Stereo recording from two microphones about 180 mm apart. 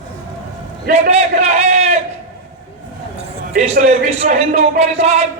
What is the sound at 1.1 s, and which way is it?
Speech, 35° right (ahead or behind).